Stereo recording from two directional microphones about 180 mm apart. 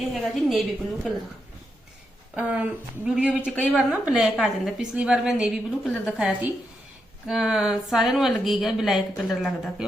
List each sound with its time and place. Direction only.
0.1 s a woman's voice: centre (ahead or behind)
2.3 s a woman's voice: 5° right (ahead or behind)